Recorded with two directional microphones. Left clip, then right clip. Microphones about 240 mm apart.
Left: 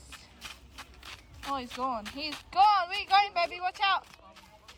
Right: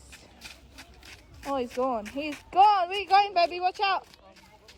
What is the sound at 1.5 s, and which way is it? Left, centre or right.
Speech, left.